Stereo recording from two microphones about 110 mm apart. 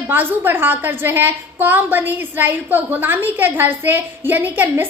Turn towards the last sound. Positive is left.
turn(degrees=-15)  # may be behind; listen again after turning